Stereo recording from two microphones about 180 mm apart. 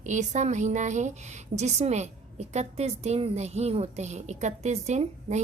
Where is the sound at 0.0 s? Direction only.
40° right (ahead or behind).